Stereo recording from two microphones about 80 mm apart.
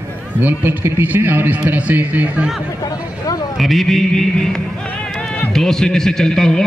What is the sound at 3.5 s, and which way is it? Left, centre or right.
A man's voice, centre.